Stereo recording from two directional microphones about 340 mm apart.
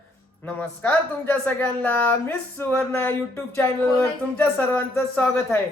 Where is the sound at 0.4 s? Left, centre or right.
Centre.